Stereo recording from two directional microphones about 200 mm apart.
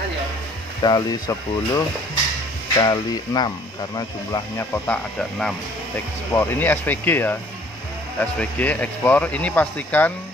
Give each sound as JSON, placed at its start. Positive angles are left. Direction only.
{"t": 0.8, "sound": "speech", "side_deg": 20}
{"t": 2.8, "sound": "speech", "side_deg": 20}